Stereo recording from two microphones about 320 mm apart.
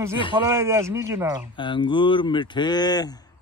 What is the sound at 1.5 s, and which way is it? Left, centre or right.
Speech, centre.